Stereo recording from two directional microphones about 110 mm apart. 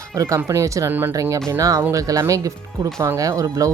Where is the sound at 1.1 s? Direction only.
30° right (ahead or behind).